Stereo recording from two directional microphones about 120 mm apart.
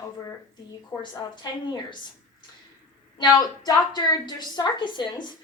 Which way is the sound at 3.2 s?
35° left (ahead or behind).